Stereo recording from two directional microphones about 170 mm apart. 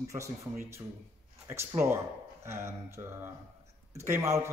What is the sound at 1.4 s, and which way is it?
Speech, 15° right (ahead or behind).